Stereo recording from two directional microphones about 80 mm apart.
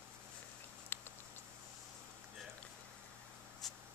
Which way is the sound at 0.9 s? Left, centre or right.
Left.